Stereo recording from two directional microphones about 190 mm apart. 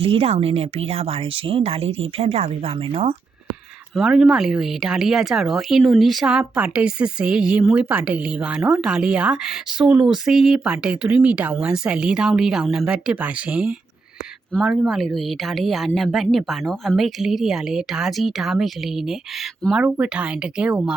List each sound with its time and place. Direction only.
0.0 s speech: 30° right (ahead or behind)
3.9 s speech: centre (ahead or behind)